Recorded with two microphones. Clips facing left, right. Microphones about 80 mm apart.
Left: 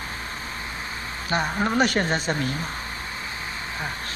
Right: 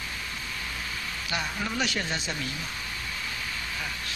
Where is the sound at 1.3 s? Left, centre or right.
Left.